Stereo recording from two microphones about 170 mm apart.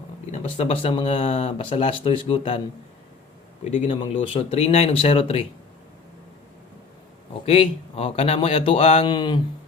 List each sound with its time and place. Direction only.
0.3 s speech: 40° left (ahead or behind)
3.6 s speech: 40° left (ahead or behind)
7.4 s speech: 35° left (ahead or behind)